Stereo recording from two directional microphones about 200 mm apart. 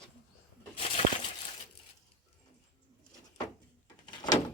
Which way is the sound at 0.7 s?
25° left (ahead or behind).